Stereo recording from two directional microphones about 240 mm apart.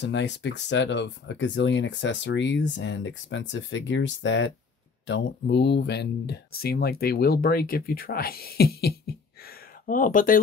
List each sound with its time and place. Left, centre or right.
0.0 s speech: left